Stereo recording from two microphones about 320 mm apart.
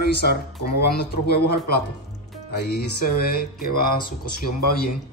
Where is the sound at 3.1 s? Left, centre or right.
Left.